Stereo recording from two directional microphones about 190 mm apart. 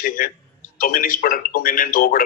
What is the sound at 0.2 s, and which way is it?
Speech, 50° left (ahead or behind).